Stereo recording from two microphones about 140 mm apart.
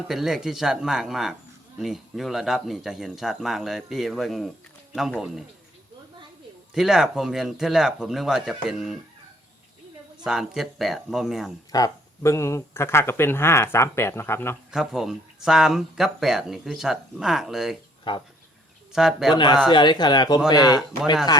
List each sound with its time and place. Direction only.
0.1 s speech: centre (ahead or behind)
6.7 s speech: 5° right (ahead or behind)
10.2 s speech: 5° right (ahead or behind)
11.7 s speech: 25° left (ahead or behind)
14.7 s speech: 5° right (ahead or behind)
18.1 s speech: 35° left (ahead or behind)
18.9 s speech: 5° right (ahead or behind)
19.3 s speech: 35° left (ahead or behind)